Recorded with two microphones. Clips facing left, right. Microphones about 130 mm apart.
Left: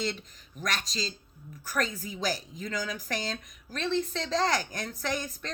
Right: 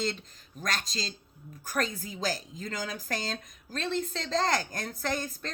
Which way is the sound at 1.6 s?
45° right (ahead or behind).